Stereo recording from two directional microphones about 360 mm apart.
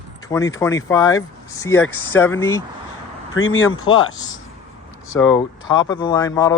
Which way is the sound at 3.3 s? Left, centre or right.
Left.